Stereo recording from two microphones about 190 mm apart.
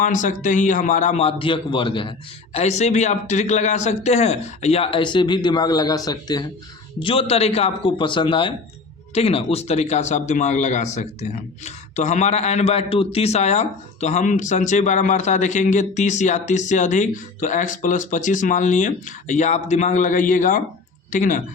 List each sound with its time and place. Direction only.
0.0 s a man's voice: 45° left (ahead or behind)